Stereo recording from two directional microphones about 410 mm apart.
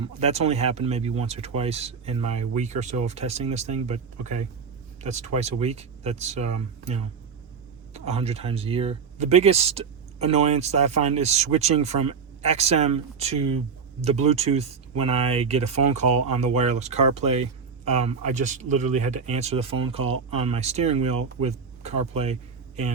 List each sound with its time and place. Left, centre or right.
0.0 s speech: centre
5.0 s speech: centre
7.9 s speech: centre